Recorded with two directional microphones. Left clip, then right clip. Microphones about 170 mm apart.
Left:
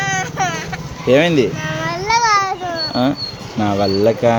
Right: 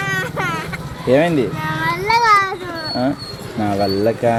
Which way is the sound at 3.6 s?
25° left (ahead or behind).